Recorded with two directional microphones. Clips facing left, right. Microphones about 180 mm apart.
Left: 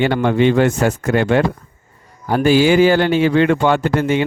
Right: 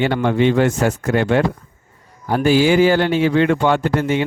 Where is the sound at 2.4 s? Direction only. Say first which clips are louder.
Left 2 dB; 80° left.